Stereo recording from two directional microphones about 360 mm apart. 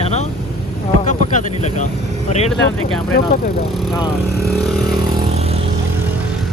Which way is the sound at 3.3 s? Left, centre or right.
Left.